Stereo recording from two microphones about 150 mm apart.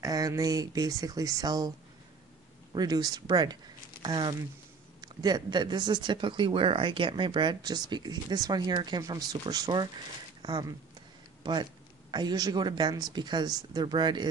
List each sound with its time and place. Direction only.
0.0 s speech: 25° right (ahead or behind)
2.7 s speech: 25° right (ahead or behind)
12.1 s speech: 30° right (ahead or behind)